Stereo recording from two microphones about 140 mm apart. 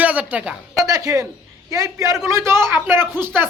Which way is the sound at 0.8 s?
25° right (ahead or behind).